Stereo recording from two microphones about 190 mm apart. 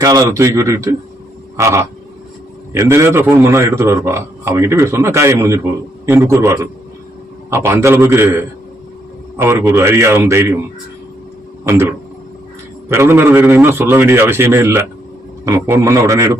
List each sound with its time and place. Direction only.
0.0 s a man's voice: 20° right (ahead or behind)
11.6 s a man's voice: 15° right (ahead or behind)